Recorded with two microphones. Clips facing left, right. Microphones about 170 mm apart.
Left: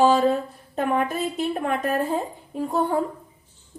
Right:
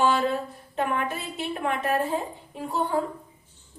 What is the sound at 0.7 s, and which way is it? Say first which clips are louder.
A woman's voice: left 4 dB; 40° left (ahead or behind).